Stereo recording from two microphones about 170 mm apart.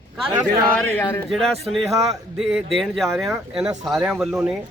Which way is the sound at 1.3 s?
Centre (ahead or behind).